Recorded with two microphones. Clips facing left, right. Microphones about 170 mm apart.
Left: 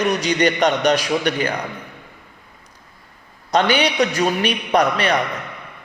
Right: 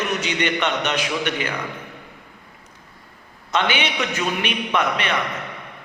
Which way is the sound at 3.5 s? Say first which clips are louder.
Left 5 dB; 40° left (ahead or behind).